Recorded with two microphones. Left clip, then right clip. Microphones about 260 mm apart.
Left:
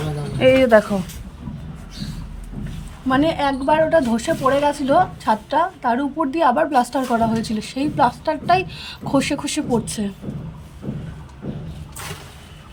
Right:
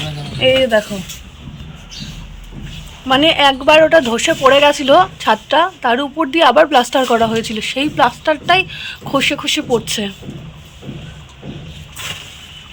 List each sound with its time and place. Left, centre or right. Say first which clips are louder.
0.3 s speech: right 1 dB; centre
3.1 s speech: right 8 dB; centre
7.3 s a woman's voice: right 7 dB; centre